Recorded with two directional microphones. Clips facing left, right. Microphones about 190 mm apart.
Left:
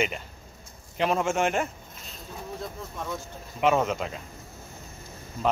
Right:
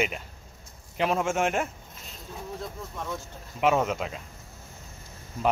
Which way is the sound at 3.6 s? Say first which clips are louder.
Left 1 dB; 5° right (ahead or behind).